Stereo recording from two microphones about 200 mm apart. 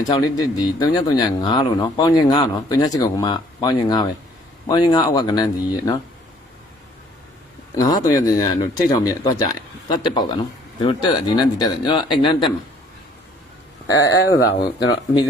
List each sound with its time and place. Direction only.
0.0 s speech: 20° left (ahead or behind)
7.8 s speech: 20° left (ahead or behind)
13.8 s speech: 15° left (ahead or behind)
14.1 s speech: 55° left (ahead or behind)